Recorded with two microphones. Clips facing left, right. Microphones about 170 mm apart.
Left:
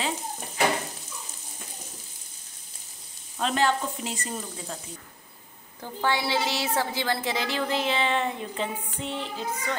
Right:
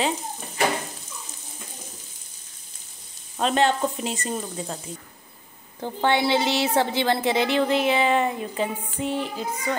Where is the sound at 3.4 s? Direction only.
25° right (ahead or behind).